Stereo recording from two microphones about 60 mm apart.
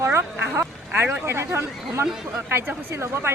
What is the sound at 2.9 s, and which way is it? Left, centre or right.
Speech, right.